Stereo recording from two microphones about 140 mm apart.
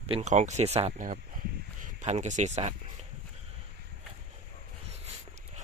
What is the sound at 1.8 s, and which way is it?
Speech, 55° right (ahead or behind).